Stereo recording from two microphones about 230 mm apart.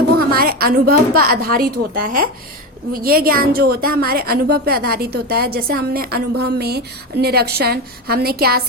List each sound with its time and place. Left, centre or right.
0.2 s a woman's voice: right